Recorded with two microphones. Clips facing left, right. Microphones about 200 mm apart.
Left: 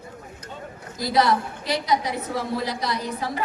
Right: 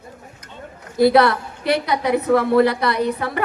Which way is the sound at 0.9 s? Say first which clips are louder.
Right 7 dB; 60° right (ahead or behind).